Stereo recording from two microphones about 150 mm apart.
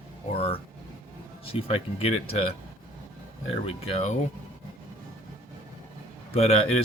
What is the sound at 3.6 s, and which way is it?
Speech, 40° left (ahead or behind).